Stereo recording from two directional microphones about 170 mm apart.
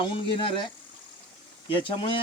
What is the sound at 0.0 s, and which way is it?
Speech, 30° left (ahead or behind).